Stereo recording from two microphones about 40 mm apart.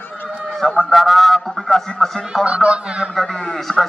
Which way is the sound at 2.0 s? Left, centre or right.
Centre.